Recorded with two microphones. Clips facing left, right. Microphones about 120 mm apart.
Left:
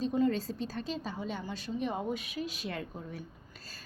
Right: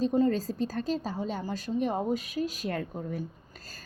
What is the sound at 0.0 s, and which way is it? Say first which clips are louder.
A woman's voice: right 4 dB; 40° right (ahead or behind).